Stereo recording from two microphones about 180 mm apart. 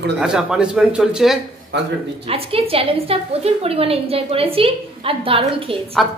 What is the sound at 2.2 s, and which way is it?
A woman's voice, 30° right (ahead or behind).